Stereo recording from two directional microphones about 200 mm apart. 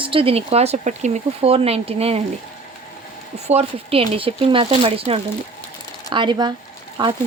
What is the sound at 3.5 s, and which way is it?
Speech, 30° right (ahead or behind).